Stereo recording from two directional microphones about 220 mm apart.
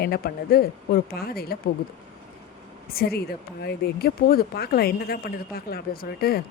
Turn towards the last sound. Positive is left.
turn(degrees=45)  # may be behind; listen again after turning